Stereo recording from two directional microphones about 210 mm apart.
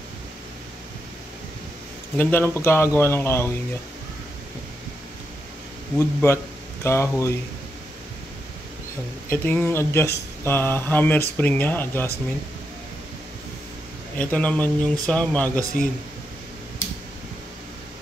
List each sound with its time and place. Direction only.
2.1 s speech: 10° left (ahead or behind)
5.9 s speech: 10° left (ahead or behind)
9.3 s speech: 10° left (ahead or behind)
14.1 s speech: 5° left (ahead or behind)